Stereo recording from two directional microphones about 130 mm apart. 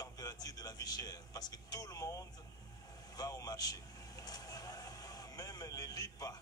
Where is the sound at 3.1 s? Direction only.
30° left (ahead or behind).